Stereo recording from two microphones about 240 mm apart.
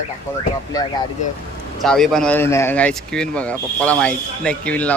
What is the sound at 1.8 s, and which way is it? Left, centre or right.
Speech, centre.